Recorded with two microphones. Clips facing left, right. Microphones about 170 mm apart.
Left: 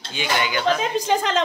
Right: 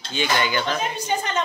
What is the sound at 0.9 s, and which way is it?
Speech, 90° left.